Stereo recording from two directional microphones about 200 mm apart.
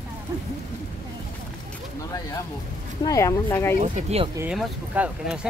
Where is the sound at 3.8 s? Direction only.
35° right (ahead or behind).